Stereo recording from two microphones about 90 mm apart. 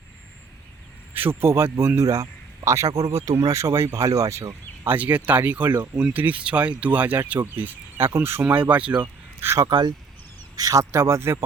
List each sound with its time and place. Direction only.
1.1 s speech: 25° right (ahead or behind)
4.9 s speech: 15° right (ahead or behind)
9.6 s speech: 50° right (ahead or behind); by 11.4 s 30° right (ahead or behind)